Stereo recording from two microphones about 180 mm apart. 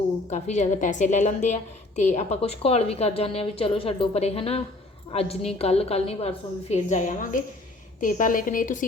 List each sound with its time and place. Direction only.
0.3 s a woman's voice: 40° left (ahead or behind)